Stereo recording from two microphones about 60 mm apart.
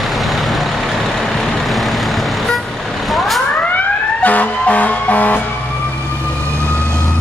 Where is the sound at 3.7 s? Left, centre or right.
Left.